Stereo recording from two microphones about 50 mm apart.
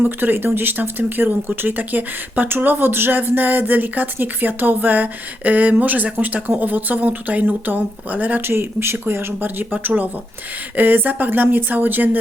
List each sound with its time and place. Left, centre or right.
0.0 s speech: right
8.4 s speech: right
9.7 s speech: right